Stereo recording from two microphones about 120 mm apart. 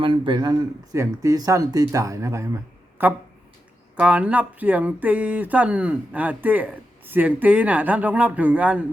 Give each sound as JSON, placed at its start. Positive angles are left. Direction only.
{"t": 0.0, "sound": "speech", "side_deg": -45}